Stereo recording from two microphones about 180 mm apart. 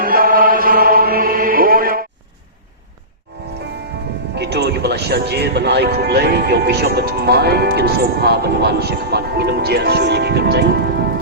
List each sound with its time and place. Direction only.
0.0 s chant: 55° right (ahead or behind)
4.4 s speech: 65° right (ahead or behind)